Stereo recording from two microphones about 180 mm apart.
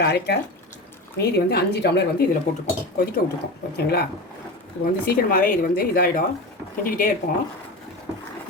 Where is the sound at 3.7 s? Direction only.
60° left (ahead or behind).